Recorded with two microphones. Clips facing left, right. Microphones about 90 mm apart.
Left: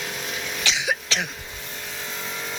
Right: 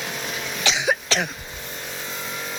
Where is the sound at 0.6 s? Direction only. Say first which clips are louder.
Right 4 dB; 25° right (ahead or behind).